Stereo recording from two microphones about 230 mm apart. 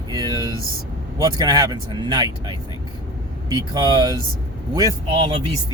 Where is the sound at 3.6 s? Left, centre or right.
Centre.